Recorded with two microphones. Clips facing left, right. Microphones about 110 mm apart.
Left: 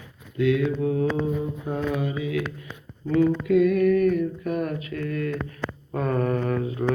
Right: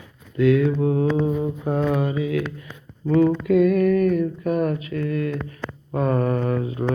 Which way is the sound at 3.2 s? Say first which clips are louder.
Right 2 dB; 45° right (ahead or behind).